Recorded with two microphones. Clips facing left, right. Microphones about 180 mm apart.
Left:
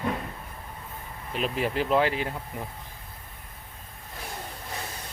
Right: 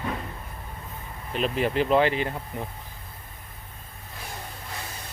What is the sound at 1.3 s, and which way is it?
Speech, 5° left (ahead or behind).